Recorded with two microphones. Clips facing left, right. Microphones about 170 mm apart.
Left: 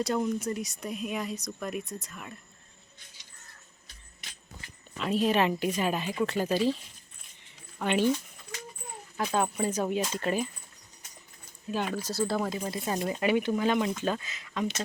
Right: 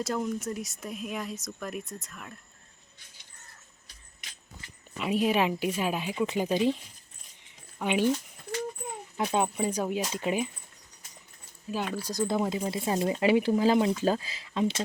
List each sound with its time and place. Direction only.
0.0 s speech: centre (ahead or behind)
4.9 s speech: 10° right (ahead or behind)
7.8 s speech: 10° right (ahead or behind)
9.1 s speech: 20° right (ahead or behind)
11.7 s speech: 5° right (ahead or behind)
12.3 s speech: 20° right (ahead or behind)